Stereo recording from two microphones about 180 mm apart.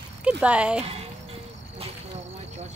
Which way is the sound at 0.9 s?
35° right (ahead or behind).